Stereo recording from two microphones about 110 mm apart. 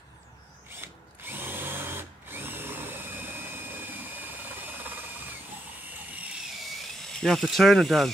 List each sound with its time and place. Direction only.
0.7 s drill: 20° right (ahead or behind)
7.2 s speech: 5° left (ahead or behind)